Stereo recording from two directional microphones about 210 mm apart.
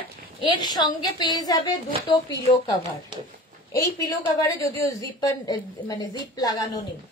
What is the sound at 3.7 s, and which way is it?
A woman's voice, 15° left (ahead or behind).